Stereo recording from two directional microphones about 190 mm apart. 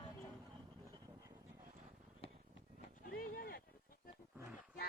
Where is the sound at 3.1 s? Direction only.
50° left (ahead or behind).